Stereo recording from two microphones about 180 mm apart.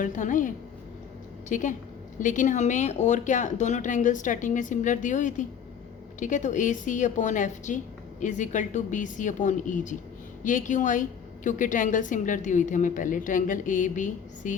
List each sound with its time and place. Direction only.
0.0 s speech: 45° left (ahead or behind)